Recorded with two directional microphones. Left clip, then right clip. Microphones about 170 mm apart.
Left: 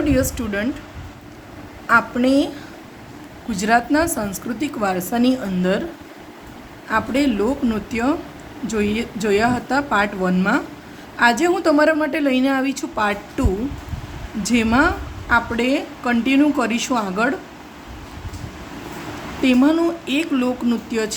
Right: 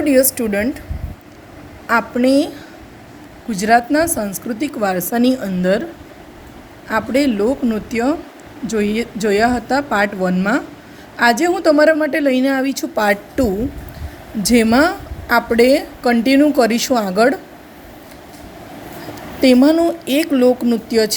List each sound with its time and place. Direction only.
0.0 s speech: 20° right (ahead or behind)
1.9 s speech: 25° right (ahead or behind)
3.5 s a woman's voice: 15° right (ahead or behind)
6.8 s a woman's voice: 25° right (ahead or behind)
19.4 s speech: 25° right (ahead or behind)